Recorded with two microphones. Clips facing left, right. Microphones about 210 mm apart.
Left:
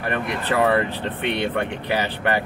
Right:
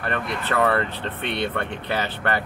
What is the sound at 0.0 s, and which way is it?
Speech, 15° left (ahead or behind).